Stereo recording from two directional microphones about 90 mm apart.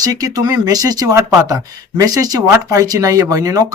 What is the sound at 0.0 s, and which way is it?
A woman's voice, 40° right (ahead or behind).